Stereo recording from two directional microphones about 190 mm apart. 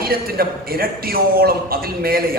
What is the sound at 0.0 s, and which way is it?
A man's voice, 50° right (ahead or behind).